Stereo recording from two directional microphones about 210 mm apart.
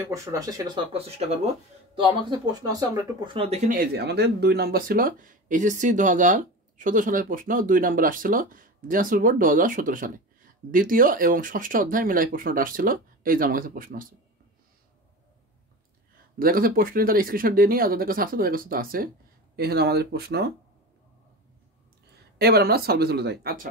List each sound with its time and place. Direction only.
0.0 s speech: 15° right (ahead or behind)
3.7 s speech: 50° right (ahead or behind)
16.3 s speech: 45° right (ahead or behind)
22.4 s speech: 50° right (ahead or behind)